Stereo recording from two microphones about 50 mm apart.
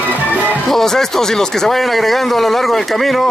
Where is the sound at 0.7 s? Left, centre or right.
Centre.